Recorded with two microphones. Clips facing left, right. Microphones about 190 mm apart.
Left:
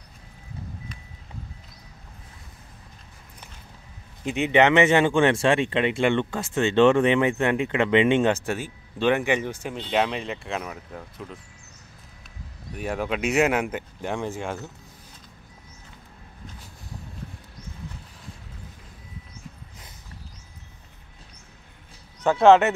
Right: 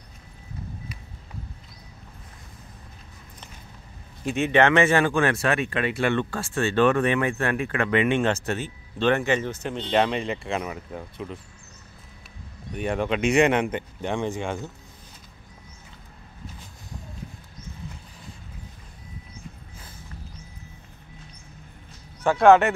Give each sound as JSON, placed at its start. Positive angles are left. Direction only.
{"t": 4.2, "sound": "speech", "side_deg": 15}
{"t": 12.7, "sound": "speech", "side_deg": 5}
{"t": 22.4, "sound": "speech", "side_deg": 20}